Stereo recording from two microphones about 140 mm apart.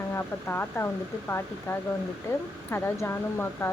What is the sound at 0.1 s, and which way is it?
Speech, 15° left (ahead or behind).